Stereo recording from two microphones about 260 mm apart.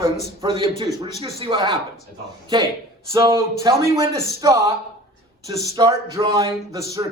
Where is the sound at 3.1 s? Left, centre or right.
Centre.